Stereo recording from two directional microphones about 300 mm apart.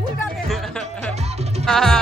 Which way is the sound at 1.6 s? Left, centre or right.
Centre.